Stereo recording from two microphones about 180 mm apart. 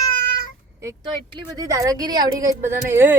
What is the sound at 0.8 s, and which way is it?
Speech, 15° right (ahead or behind).